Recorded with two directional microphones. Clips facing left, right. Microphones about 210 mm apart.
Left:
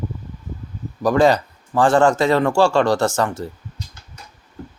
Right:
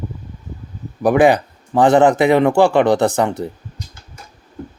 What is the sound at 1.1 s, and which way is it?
Speech, 15° right (ahead or behind).